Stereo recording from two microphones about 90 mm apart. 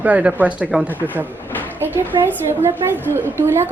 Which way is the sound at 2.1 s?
60° right (ahead or behind).